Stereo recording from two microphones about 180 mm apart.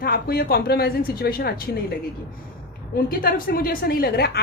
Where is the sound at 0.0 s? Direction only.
55° left (ahead or behind).